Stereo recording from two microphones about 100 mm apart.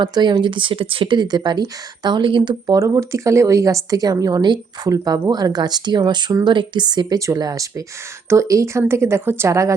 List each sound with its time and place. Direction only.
0.0 s speech: 45° right (ahead or behind)
2.7 s a woman's voice: 30° right (ahead or behind)